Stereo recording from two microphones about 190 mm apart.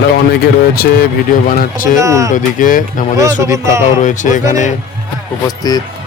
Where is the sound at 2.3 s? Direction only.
45° left (ahead or behind).